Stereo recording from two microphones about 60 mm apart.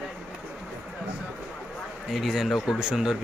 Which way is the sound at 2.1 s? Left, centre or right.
Centre.